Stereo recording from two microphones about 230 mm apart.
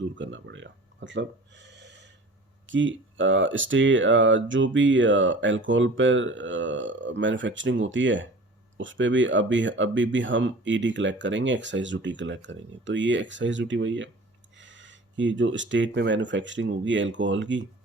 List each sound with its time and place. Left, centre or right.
0.2 s speech: right